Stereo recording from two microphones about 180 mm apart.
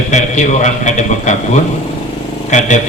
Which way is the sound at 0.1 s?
40° left (ahead or behind).